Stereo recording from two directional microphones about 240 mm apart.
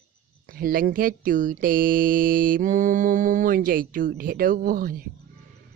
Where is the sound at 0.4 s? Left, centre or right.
Right.